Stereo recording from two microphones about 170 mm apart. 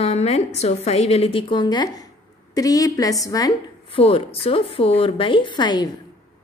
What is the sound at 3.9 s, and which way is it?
A woman's voice, 35° left (ahead or behind).